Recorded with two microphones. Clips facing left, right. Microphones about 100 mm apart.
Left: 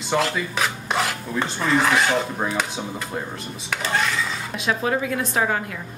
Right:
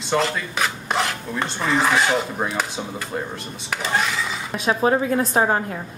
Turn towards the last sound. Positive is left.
turn(degrees=-35)  # may be behind; listen again after turning